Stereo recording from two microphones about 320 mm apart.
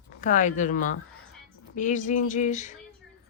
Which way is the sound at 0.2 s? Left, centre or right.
Left.